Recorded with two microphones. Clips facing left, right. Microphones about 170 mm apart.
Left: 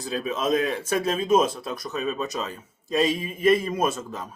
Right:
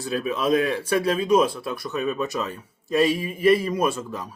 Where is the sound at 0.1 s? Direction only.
25° left (ahead or behind).